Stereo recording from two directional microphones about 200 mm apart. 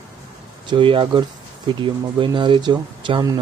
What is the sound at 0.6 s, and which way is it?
Speech, 25° right (ahead or behind).